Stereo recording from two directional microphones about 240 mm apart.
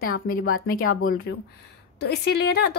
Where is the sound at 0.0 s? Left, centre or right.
Left.